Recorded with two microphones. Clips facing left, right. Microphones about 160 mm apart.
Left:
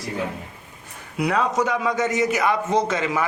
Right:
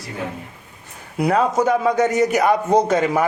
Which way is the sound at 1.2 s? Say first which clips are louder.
Right 4 dB; 50° right (ahead or behind).